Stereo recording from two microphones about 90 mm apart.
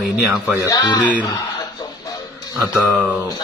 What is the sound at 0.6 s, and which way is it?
Speech, 45° left (ahead or behind).